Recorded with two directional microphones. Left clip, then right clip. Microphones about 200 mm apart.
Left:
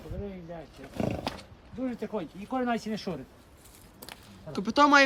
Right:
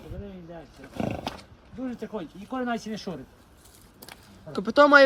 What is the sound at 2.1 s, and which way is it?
Speech, 35° left (ahead or behind).